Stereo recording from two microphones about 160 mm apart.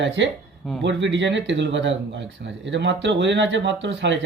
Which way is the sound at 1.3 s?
90° right.